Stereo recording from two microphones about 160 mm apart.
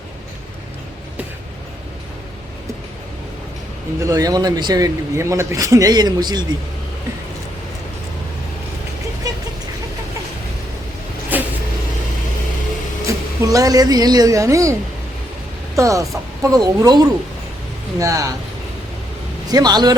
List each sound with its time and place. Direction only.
4.0 s a man's voice: 20° right (ahead or behind)
11.3 s vehicle: 10° right (ahead or behind)
13.1 s a woman's voice: 20° right (ahead or behind)
19.5 s a man's voice: 25° right (ahead or behind)